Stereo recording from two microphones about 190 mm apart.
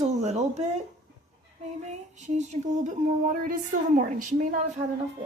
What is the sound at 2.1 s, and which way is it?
Speech, 40° right (ahead or behind).